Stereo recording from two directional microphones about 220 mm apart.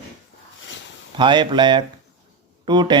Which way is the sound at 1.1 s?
20° right (ahead or behind).